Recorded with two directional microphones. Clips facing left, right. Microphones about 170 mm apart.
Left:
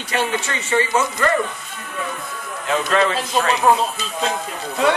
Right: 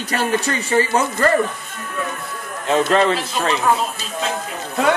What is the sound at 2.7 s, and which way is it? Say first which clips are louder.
Speech: right 3 dB; 30° right (ahead or behind).